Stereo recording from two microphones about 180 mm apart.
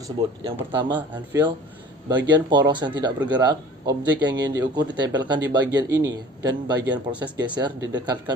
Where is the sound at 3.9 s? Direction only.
25° right (ahead or behind).